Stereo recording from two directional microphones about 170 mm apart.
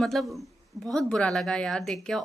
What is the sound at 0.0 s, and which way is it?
A woman's voice, centre (ahead or behind).